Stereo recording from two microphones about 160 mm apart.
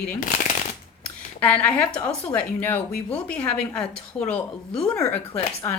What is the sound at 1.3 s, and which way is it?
Speech, 10° left (ahead or behind).